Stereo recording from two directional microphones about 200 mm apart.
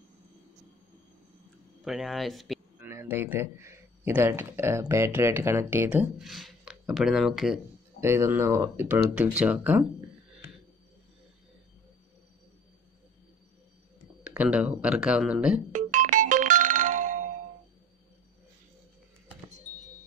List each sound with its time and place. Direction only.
1.9 s speech: centre (ahead or behind)
2.9 s speech: 10° right (ahead or behind)
8.0 s speech: 15° right (ahead or behind)
14.2 s speech: 5° right (ahead or behind)
15.7 s music: 40° right (ahead or behind)